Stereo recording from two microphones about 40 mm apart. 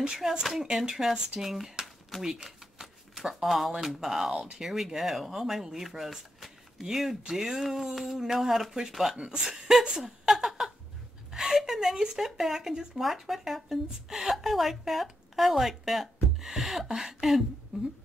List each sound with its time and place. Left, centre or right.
0.0 s speech: centre
2.2 s shuffling cards: centre
3.8 s speech: centre
7.9 s a sound: centre
8.2 s speech: centre
9.2 s speech: centre
17.7 s a sound: centre